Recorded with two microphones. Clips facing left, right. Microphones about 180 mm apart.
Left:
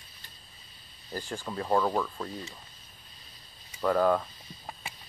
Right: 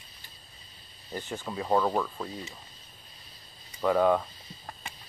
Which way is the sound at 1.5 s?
5° right (ahead or behind).